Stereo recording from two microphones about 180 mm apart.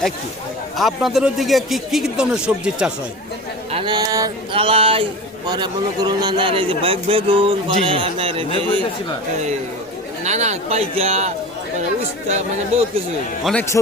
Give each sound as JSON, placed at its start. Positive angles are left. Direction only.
{"t": 0.8, "sound": "speech", "side_deg": 0}
{"t": 3.7, "sound": "a sound", "side_deg": -30}
{"t": 4.5, "sound": "a man's voice", "side_deg": -30}
{"t": 10.2, "sound": "speech", "side_deg": -40}
{"t": 13.4, "sound": "speech", "side_deg": 5}